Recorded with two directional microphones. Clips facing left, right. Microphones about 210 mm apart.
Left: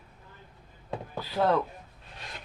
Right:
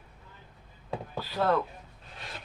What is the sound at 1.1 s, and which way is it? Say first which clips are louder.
Speech: left 2 dB; 20° left (ahead or behind).